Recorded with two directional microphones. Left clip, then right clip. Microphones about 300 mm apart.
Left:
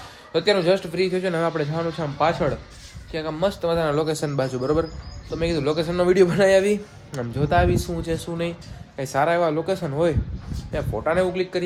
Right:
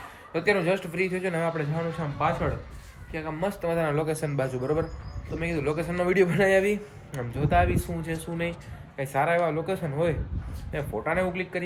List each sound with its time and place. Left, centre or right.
0.3 s a man's voice: centre